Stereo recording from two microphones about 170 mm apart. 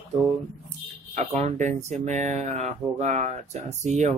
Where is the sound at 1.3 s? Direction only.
45° right (ahead or behind).